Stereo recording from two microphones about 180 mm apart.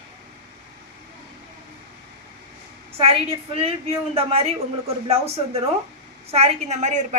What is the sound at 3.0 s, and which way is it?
Speech, 35° right (ahead or behind).